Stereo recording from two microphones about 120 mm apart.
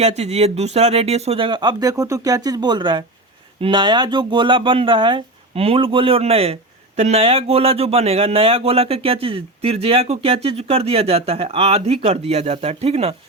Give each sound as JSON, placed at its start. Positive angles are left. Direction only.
{"t": 0.0, "sound": "speech", "side_deg": -65}
{"t": 1.5, "sound": "speech", "side_deg": -40}